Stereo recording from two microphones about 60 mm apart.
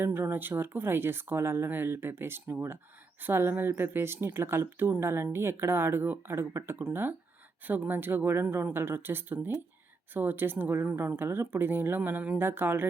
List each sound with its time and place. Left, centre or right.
0.0 s speech: right
6.7 s speech: right
12.4 s speech: right